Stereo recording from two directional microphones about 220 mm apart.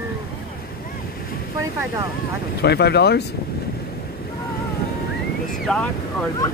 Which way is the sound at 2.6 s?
50° left (ahead or behind).